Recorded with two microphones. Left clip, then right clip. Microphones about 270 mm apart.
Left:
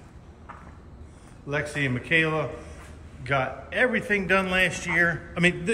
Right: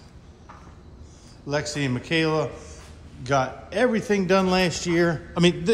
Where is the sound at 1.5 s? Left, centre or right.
Centre.